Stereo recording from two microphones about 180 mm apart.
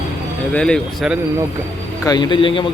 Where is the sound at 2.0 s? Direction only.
25° left (ahead or behind).